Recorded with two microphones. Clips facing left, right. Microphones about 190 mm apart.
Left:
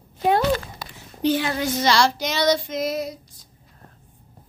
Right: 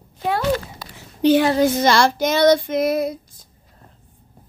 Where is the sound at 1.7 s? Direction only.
55° right (ahead or behind).